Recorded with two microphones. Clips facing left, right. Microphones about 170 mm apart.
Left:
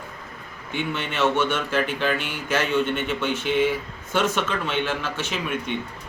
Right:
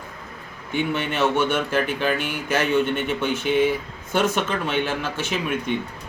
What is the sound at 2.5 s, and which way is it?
Speech, 10° right (ahead or behind).